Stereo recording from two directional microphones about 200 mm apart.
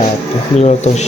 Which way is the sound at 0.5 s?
35° left (ahead or behind).